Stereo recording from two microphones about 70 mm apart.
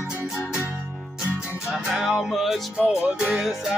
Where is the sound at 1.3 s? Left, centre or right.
Centre.